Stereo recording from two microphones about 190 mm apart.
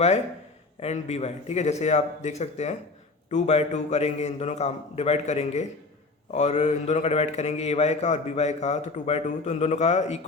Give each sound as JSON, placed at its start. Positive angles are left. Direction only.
{"t": 0.8, "sound": "a man's voice", "side_deg": 35}